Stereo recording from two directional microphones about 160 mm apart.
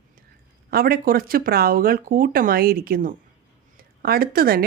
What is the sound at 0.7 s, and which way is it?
Speech, 70° right (ahead or behind).